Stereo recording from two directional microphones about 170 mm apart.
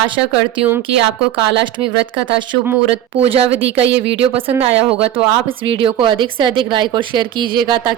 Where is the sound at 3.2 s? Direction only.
35° right (ahead or behind).